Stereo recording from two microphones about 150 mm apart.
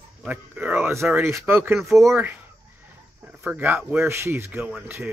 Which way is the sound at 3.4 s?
10° right (ahead or behind).